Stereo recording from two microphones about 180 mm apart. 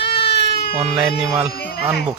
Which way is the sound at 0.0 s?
30° left (ahead or behind).